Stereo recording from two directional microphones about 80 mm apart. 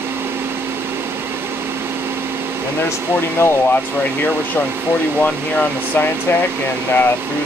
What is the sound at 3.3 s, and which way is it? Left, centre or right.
Speech, left.